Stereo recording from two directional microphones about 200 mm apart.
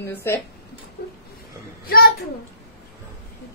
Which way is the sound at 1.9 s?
50° left (ahead or behind).